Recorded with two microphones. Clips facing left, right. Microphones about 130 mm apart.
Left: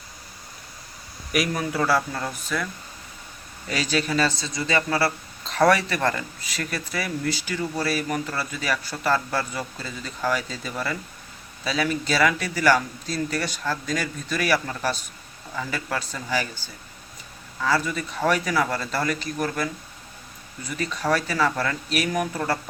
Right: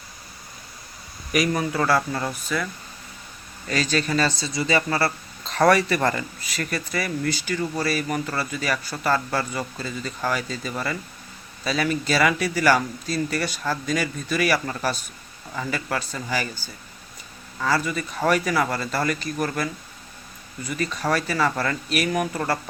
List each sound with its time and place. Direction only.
1.3 s speech: centre (ahead or behind)
3.7 s speech: 10° left (ahead or behind)
17.6 s speech: centre (ahead or behind)